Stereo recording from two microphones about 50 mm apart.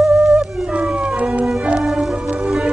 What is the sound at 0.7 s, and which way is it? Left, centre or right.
Music, centre.